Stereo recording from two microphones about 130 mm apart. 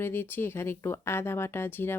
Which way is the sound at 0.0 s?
15° left (ahead or behind).